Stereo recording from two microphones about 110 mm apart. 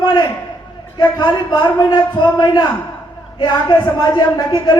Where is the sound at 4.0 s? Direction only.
40° left (ahead or behind).